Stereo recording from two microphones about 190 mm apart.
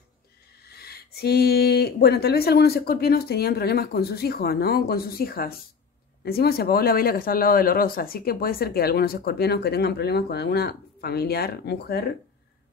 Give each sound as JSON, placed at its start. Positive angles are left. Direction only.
{"t": 0.6, "sound": "speech", "side_deg": 55}